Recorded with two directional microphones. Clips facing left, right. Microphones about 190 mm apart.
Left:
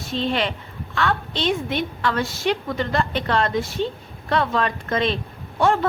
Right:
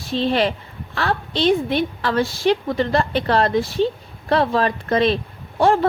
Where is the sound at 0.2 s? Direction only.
35° right (ahead or behind).